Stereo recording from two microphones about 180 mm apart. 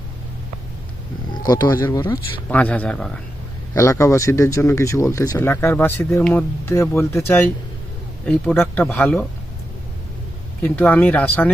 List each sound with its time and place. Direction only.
1.5 s speech: 15° left (ahead or behind)
10.6 s speech: 10° left (ahead or behind)